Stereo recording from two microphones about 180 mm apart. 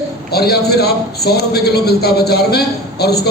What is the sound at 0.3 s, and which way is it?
A man's voice, 60° left (ahead or behind).